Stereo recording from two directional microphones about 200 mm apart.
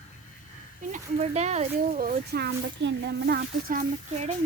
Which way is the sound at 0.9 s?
35° right (ahead or behind).